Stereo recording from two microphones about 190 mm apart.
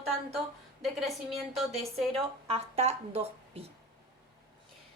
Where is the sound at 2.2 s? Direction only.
30° right (ahead or behind).